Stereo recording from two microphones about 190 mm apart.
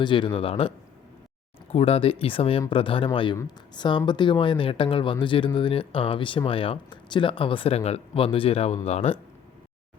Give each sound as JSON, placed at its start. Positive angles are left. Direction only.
{"t": 0.0, "sound": "speech", "side_deg": 25}
{"t": 1.7, "sound": "speech", "side_deg": 30}